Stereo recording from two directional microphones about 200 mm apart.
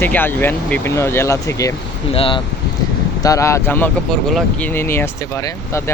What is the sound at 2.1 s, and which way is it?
Speech, 25° left (ahead or behind).